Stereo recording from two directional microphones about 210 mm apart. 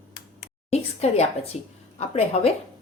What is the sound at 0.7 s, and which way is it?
A woman's voice, 30° left (ahead or behind).